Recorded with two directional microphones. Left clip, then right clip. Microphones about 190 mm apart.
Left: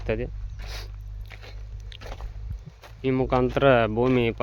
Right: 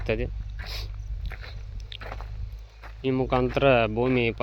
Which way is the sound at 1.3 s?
5° right (ahead or behind).